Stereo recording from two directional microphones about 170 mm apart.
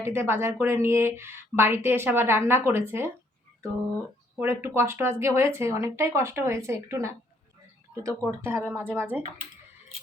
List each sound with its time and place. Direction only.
0.0 s a woman's voice: 15° right (ahead or behind)
4.4 s a woman's voice: 15° right (ahead or behind)
8.3 s a woman's voice: 15° right (ahead or behind)